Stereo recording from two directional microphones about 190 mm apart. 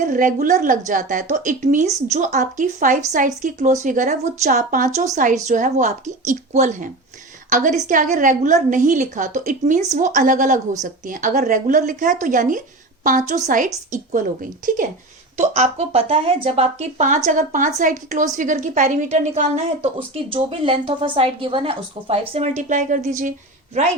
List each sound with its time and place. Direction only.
0.0 s speech: 45° right (ahead or behind)